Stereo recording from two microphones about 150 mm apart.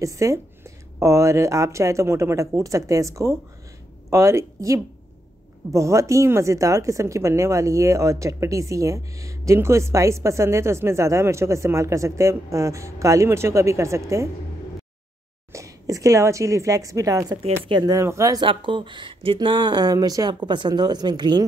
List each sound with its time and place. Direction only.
0.0 s a woman's voice: 20° right (ahead or behind)
15.5 s a woman's voice: 20° right (ahead or behind)
17.4 s a woman's voice: 35° right (ahead or behind)